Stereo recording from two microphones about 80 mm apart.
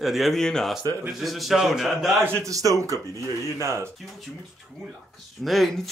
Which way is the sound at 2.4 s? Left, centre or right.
Right.